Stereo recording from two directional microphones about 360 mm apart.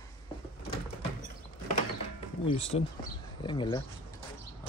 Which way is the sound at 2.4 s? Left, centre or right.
Centre.